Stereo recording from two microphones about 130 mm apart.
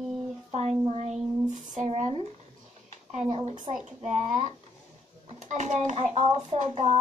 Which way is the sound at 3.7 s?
70° right (ahead or behind).